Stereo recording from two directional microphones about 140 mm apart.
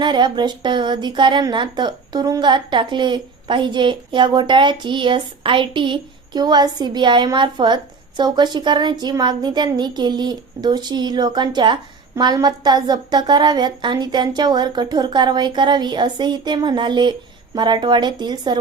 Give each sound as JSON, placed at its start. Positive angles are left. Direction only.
{"t": 0.0, "sound": "speech", "side_deg": -30}